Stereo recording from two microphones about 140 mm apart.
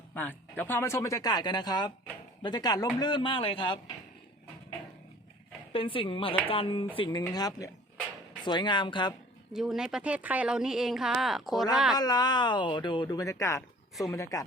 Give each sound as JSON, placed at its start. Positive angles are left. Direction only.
{"t": 0.1, "sound": "a man's voice", "side_deg": 10}
{"t": 5.7, "sound": "a man's voice", "side_deg": 40}
{"t": 7.2, "sound": "a man's voice", "side_deg": 25}
{"t": 9.5, "sound": "speech", "side_deg": -5}
{"t": 11.9, "sound": "speech", "side_deg": 30}